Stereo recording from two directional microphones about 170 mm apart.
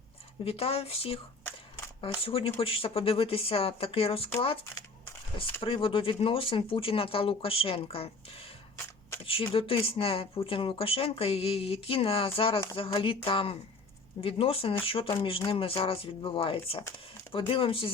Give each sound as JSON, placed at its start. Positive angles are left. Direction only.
{"t": 0.4, "sound": "speech", "side_deg": 35}
{"t": 2.2, "sound": "speech", "side_deg": 35}
{"t": 9.2, "sound": "speech", "side_deg": 30}